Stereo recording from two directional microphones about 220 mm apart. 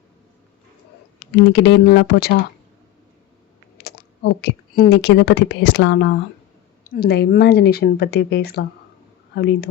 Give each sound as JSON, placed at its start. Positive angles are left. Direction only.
{"t": 1.4, "sound": "speech", "side_deg": 50}
{"t": 3.8, "sound": "speech", "side_deg": 50}
{"t": 6.8, "sound": "speech", "side_deg": 40}